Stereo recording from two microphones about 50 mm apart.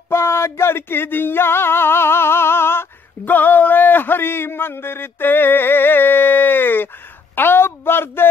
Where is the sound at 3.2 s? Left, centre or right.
Left.